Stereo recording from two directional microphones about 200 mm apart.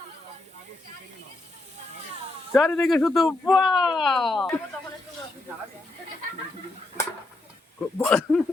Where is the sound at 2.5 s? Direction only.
Centre (ahead or behind).